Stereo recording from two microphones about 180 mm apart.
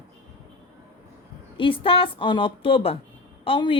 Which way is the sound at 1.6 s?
30° left (ahead or behind).